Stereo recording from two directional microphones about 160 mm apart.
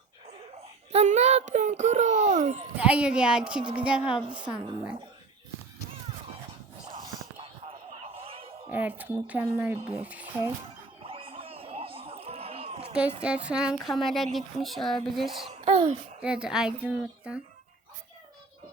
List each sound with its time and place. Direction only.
0.9 s a child's voice: 45° right (ahead or behind)
2.7 s speech: 5° right (ahead or behind)
4.3 s a woman's voice: 30° right (ahead or behind)
6.8 s a sound: 25° right (ahead or behind)
8.7 s speech: 10° right (ahead or behind)
9.7 s speech: 35° right (ahead or behind)
10.0 s speech: 10° right (ahead or behind)
11.0 s a sound: 35° right (ahead or behind)
12.9 s speech: 5° right (ahead or behind)
15.4 s a child's voice: 40° right (ahead or behind)
16.2 s speech: 5° right (ahead or behind)